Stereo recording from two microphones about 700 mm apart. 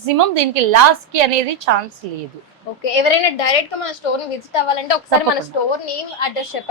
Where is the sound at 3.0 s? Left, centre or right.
Left.